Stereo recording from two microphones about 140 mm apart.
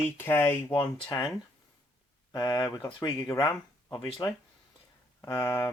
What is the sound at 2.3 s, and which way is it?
Speech, 35° left (ahead or behind).